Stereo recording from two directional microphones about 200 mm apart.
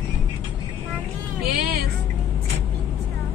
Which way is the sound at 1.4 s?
50° right (ahead or behind).